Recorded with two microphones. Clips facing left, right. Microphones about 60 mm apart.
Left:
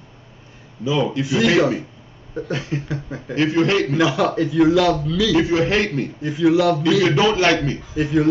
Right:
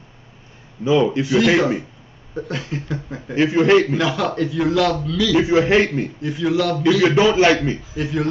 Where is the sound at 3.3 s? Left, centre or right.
Centre.